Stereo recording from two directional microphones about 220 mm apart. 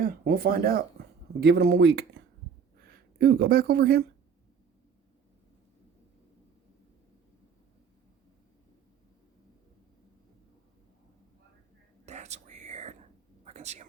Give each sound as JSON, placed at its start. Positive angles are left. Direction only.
{"t": 0.0, "sound": "speech", "side_deg": -40}
{"t": 12.0, "sound": "whispering", "side_deg": -30}
{"t": 13.4, "sound": "a sound", "side_deg": -30}